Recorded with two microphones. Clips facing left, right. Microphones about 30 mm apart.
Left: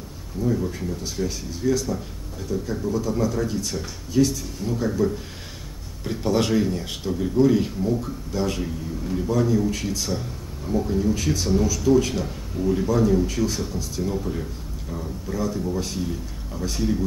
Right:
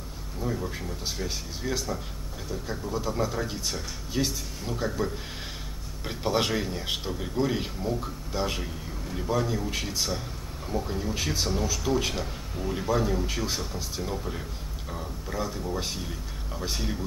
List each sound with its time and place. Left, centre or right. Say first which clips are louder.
0.4 s a man's voice: left 7 dB; centre
1.5 s a man's voice: left 9 dB; right
14.1 s a man's voice: left 6 dB; centre
15.3 s speech: left 5 dB; centre
16.0 s a man's voice: left 7 dB; centre